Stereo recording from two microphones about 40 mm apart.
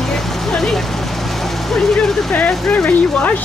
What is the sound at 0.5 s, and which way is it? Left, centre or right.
Vehicle, centre.